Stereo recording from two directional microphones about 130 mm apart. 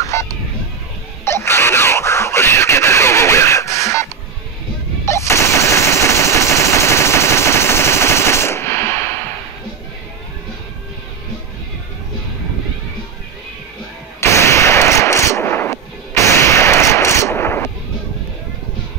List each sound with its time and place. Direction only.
0.0 s music: 25° left (ahead or behind)
1.2 s a sound: 20° left (ahead or behind)
5.0 s machine gun: 20° left (ahead or behind)
14.2 s artillery fire: 20° left (ahead or behind)